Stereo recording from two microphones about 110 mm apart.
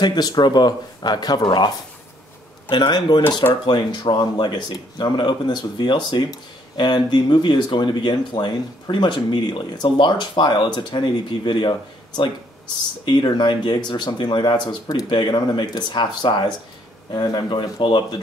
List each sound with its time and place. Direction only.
0.0 s speech: 40° left (ahead or behind)
2.7 s speech: 40° left (ahead or behind)
13.0 s speech: 45° left (ahead or behind)